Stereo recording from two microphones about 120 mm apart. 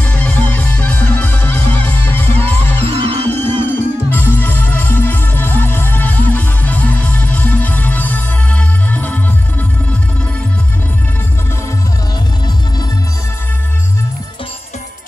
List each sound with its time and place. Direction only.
0.0 s music: 10° left (ahead or behind)
2.8 s music: 55° right (ahead or behind)
3.3 s music: 20° left (ahead or behind)